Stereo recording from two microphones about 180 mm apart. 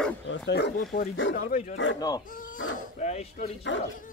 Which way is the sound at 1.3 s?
50° left (ahead or behind).